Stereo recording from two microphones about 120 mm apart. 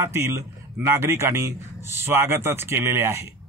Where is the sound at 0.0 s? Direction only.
20° right (ahead or behind).